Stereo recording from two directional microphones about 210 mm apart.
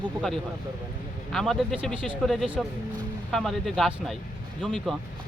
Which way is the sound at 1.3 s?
Centre (ahead or behind).